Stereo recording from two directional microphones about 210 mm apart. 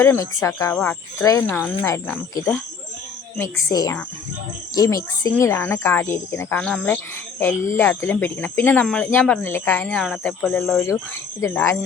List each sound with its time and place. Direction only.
0.0 s speech: 10° left (ahead or behind)